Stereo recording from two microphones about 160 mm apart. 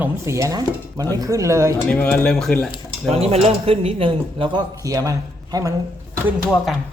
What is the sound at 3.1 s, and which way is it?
Speech, 40° right (ahead or behind).